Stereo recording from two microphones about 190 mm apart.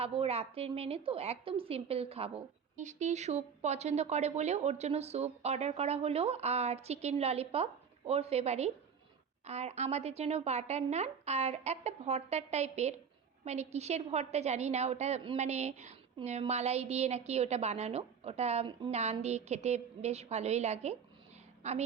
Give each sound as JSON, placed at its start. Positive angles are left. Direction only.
{"t": 0.0, "sound": "a woman's voice", "side_deg": -30}